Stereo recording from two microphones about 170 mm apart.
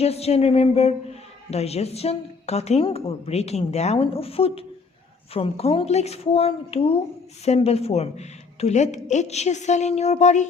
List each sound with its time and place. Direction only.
0.0 s a woman's voice: 40° left (ahead or behind)